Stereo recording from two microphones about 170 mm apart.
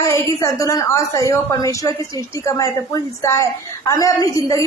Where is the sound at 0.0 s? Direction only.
20° left (ahead or behind).